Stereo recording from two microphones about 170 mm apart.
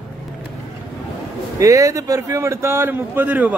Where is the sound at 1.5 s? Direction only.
20° right (ahead or behind).